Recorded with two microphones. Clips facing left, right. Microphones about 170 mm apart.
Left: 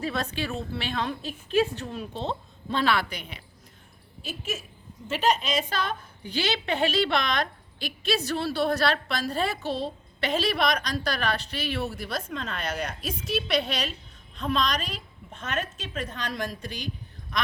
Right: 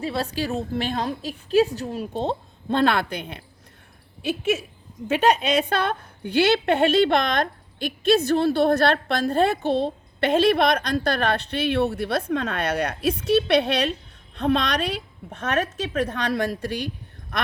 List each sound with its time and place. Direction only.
0.0 s a woman's voice: 30° right (ahead or behind); by 3.4 s 55° right (ahead or behind)
5.0 s a woman's voice: 65° right (ahead or behind)
17.3 s a sound: 60° right (ahead or behind)